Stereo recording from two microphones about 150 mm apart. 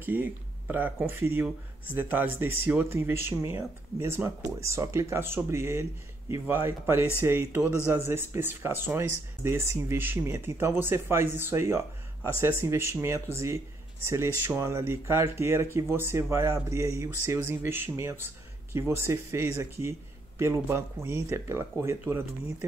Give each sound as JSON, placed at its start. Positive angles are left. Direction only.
{"t": 0.0, "sound": "speech", "side_deg": -15}